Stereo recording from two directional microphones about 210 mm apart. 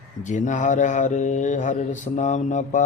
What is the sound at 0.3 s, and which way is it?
Mantra, 35° left (ahead or behind).